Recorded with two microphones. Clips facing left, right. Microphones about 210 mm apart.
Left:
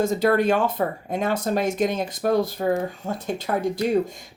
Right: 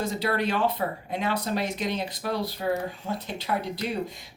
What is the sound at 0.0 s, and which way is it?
Speech, 45° left (ahead or behind).